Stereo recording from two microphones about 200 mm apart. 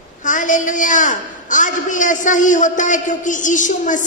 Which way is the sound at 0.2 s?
40° left (ahead or behind).